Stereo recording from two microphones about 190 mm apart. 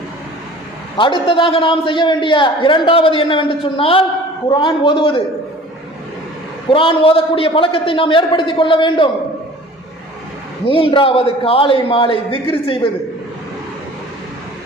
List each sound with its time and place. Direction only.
0.9 s a man's voice: 25° left (ahead or behind)
6.7 s a man's voice: 25° left (ahead or behind)
10.7 s a man's voice: 30° left (ahead or behind)